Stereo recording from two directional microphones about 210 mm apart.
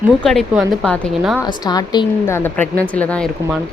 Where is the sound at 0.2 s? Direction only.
Centre (ahead or behind).